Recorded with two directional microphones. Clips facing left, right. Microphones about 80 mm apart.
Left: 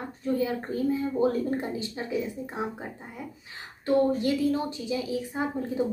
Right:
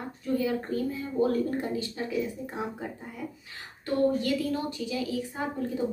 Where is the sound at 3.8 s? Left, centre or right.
Left.